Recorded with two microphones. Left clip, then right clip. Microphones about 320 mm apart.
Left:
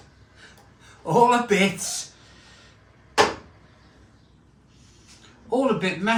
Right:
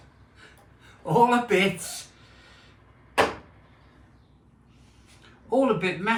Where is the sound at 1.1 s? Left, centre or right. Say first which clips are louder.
Left 2 dB; centre.